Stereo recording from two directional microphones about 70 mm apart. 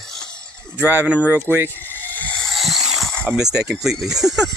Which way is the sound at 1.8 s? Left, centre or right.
Left.